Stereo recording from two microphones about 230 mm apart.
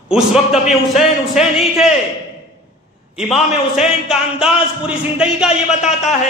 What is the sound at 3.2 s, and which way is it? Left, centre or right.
A man's voice, centre.